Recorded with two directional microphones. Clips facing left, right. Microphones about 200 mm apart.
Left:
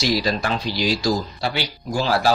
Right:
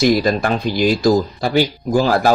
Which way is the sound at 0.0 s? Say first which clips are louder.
Right 7 dB; 50° right (ahead or behind).